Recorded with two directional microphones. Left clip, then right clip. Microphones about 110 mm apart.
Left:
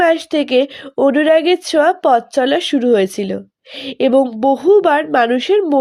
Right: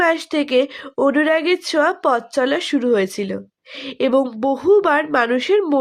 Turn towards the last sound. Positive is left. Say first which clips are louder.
# left 3 dB
turn(degrees=20)  # may be behind; listen again after turning